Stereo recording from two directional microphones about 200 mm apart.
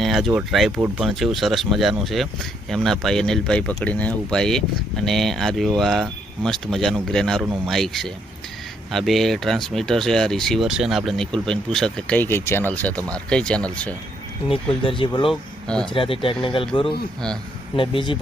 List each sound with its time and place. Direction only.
0.0 s speech: centre (ahead or behind)
14.5 s speech: 25° left (ahead or behind)
15.3 s speech: 5° left (ahead or behind)
15.9 s speech: 25° left (ahead or behind)